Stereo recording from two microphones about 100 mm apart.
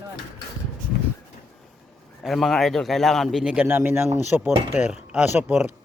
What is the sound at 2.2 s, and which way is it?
A man's voice, centre (ahead or behind).